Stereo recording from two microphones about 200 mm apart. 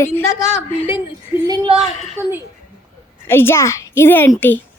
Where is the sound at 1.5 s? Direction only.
30° right (ahead or behind).